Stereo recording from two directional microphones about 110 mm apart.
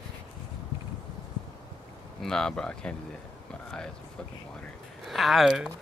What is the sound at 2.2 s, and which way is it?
Speech, 5° left (ahead or behind).